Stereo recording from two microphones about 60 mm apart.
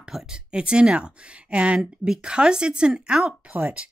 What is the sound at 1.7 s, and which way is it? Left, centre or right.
Speech, centre.